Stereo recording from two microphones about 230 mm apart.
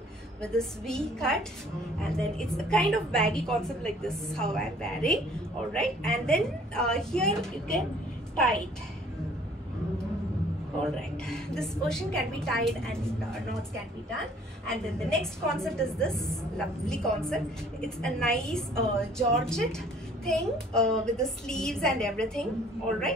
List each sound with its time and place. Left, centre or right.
0.4 s a woman's voice: centre
10.9 s a woman's voice: centre
14.7 s a woman's voice: centre